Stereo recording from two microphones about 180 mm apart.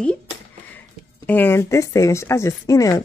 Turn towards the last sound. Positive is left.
turn(degrees=20)  # may be behind; listen again after turning